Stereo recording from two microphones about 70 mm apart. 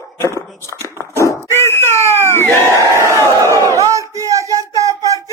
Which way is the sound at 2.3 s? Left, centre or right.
Left.